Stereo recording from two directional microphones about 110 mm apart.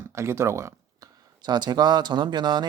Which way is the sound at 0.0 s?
25° right (ahead or behind).